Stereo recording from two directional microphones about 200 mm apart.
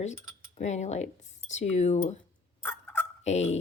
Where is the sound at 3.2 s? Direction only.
35° left (ahead or behind).